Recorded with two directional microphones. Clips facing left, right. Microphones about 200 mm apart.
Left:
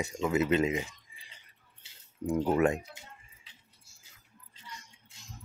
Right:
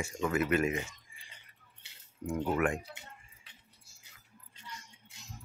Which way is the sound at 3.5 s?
60° right (ahead or behind).